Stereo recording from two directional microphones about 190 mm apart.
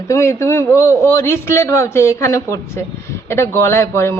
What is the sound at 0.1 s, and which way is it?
A man's voice, 15° left (ahead or behind).